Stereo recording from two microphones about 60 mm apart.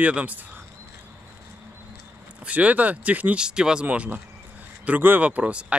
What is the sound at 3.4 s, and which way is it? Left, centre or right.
Speech, centre.